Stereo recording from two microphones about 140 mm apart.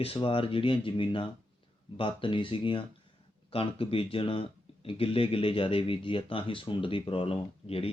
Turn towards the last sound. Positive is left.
turn(degrees=45)  # may be behind; listen again after turning